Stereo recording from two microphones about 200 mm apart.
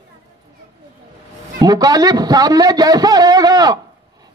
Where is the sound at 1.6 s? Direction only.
20° right (ahead or behind).